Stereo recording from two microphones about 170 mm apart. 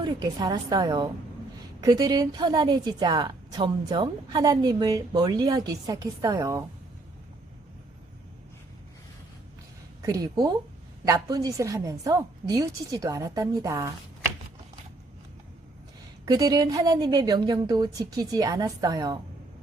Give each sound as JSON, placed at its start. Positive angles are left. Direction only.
{"t": 0.0, "sound": "a woman's voice", "side_deg": -25}
{"t": 10.0, "sound": "a woman's voice", "side_deg": -20}
{"t": 16.2, "sound": "a woman's voice", "side_deg": -20}